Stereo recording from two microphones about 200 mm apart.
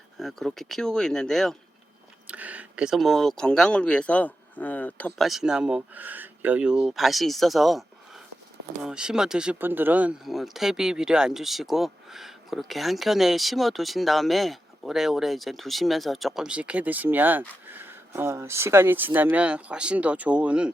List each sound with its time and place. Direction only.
0.2 s speech: centre (ahead or behind)